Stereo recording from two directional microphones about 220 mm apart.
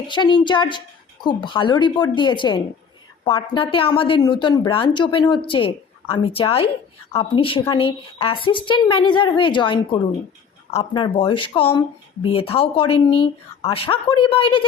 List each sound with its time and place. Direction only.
0.1 s speech: 20° left (ahead or behind)